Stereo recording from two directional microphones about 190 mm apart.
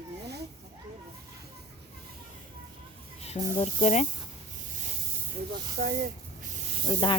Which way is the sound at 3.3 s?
35° left (ahead or behind).